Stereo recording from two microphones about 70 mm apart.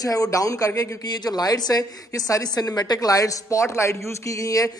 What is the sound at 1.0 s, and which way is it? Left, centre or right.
Speech, left.